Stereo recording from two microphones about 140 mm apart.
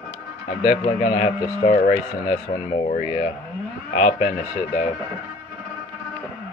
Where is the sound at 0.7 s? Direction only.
55° left (ahead or behind).